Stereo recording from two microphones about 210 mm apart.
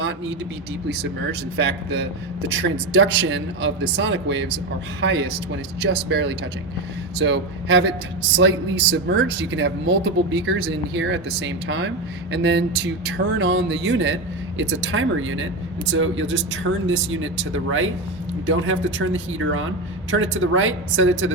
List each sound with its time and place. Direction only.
1.5 s speech: 55° right (ahead or behind)
9.0 s speech: 60° right (ahead or behind)